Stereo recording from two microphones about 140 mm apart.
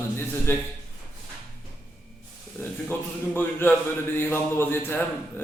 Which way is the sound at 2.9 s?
15° left (ahead or behind).